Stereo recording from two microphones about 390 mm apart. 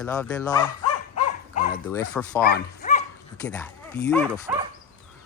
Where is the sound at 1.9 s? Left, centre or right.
Centre.